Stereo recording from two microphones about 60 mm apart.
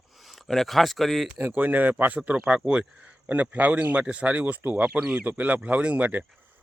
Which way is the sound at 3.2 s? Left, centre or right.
Right.